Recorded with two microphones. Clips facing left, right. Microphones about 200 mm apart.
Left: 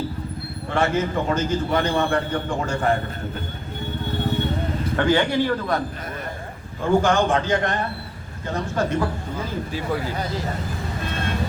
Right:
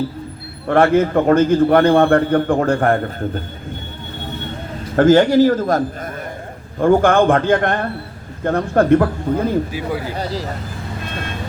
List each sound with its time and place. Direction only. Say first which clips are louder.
0.7 s a man's voice: right 9 dB; 55° right (ahead or behind)
4.9 s speech: right 10 dB; 45° right (ahead or behind)
6.7 s a man's voice: right 6 dB; 55° right (ahead or behind)
10.2 s speech: right 4 dB; 35° right (ahead or behind)